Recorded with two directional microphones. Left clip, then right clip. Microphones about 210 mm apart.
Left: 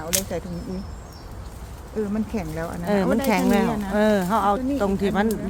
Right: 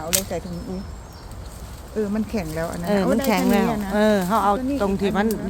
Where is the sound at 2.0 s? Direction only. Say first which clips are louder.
Right 2 dB; 15° right (ahead or behind).